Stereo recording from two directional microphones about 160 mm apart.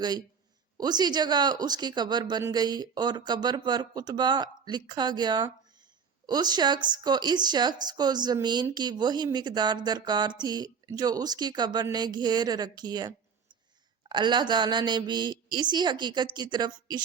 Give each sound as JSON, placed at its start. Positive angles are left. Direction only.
{"t": 0.8, "sound": "speech", "side_deg": -25}